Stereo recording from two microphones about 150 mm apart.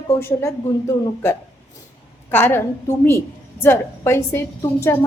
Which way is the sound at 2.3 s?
15° left (ahead or behind).